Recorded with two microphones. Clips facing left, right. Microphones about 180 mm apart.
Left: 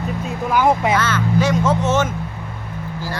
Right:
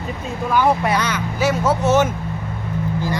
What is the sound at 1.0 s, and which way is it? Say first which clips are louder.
Speech: left 3 dB; 15° right (ahead or behind).